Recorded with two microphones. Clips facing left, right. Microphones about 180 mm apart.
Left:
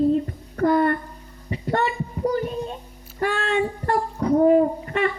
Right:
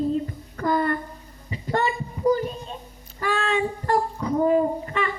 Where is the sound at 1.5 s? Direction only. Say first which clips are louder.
Left 2 dB; 60° left (ahead or behind).